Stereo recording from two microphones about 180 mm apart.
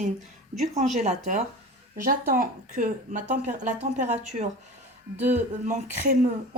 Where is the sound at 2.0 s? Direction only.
55° right (ahead or behind).